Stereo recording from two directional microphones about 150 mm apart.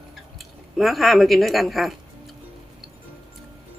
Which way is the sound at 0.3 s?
Centre (ahead or behind).